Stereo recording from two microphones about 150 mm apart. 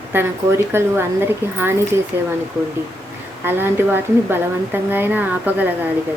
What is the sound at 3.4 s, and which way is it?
A woman's voice, 15° right (ahead or behind).